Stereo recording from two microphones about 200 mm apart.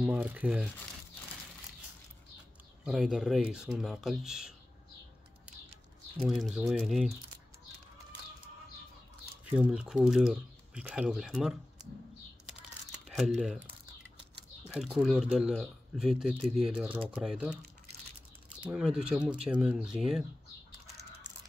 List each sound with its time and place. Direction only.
0.0 s speech: 5° right (ahead or behind)
2.8 s speech: centre (ahead or behind)
6.1 s speech: centre (ahead or behind)
9.4 s speech: 5° right (ahead or behind)
12.9 s a sound: centre (ahead or behind)
14.7 s speech: centre (ahead or behind)
18.7 s speech: 5° right (ahead or behind)